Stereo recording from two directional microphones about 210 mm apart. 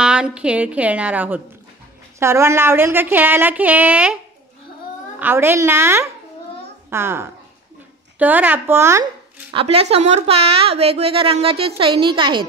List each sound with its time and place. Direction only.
0.0 s speech: 5° right (ahead or behind)
5.2 s speech: 10° right (ahead or behind)